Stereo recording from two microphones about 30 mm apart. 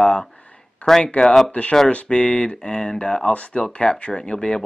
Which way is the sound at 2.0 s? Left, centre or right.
Left.